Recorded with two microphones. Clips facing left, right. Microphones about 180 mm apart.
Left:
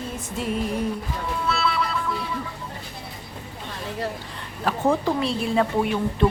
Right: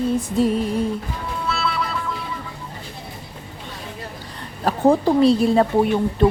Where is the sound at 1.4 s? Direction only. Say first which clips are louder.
Even; centre (ahead or behind).